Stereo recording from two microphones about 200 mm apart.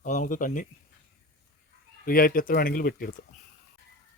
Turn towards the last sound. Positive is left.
turn(degrees=45)  # may be behind; listen again after turning